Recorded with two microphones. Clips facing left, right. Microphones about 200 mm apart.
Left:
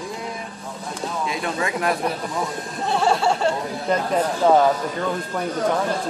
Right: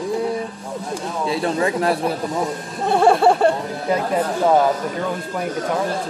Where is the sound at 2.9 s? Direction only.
55° right (ahead or behind).